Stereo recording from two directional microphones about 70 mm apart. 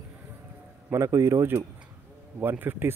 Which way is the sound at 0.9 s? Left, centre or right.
Right.